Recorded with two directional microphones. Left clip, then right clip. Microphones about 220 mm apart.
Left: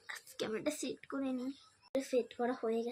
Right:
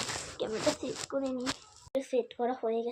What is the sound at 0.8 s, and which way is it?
Speech, 25° left (ahead or behind).